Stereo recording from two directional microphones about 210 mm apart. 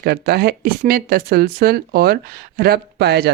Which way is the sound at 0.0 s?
50° right (ahead or behind).